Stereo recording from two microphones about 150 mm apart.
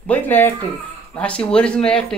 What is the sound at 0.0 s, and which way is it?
A man's voice, 10° left (ahead or behind).